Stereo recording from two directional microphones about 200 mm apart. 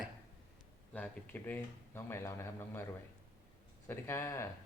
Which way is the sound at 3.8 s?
10° left (ahead or behind).